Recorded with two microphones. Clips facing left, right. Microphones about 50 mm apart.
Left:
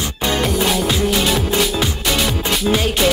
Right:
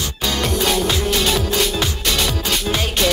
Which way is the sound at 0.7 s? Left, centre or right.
Centre.